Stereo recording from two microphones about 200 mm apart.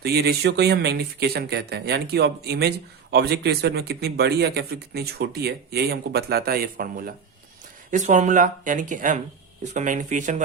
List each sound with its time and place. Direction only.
0.0 s speech: 50° right (ahead or behind)